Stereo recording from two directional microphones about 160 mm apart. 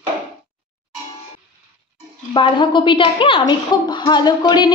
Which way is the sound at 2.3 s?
30° left (ahead or behind).